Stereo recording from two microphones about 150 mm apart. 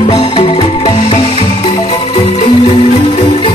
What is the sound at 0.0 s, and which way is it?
Music, 40° left (ahead or behind).